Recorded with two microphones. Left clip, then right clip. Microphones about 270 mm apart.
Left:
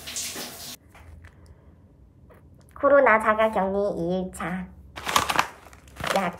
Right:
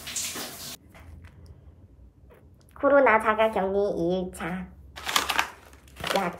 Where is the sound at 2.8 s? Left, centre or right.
Centre.